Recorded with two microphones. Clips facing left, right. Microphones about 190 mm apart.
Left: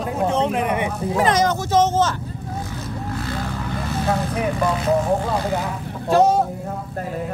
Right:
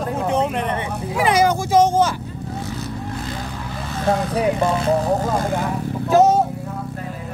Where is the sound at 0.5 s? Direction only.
10° left (ahead or behind).